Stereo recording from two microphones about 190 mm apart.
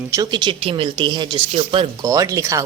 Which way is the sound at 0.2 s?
20° right (ahead or behind).